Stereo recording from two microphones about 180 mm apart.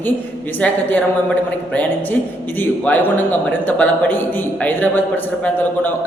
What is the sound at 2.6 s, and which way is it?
A man's voice, 10° left (ahead or behind).